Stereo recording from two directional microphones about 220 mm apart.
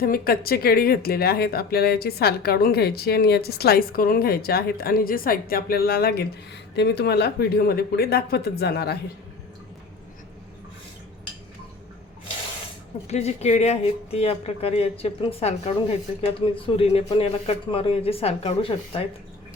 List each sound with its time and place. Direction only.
0.0 s speech: 40° left (ahead or behind)
13.1 s speech: 30° left (ahead or behind)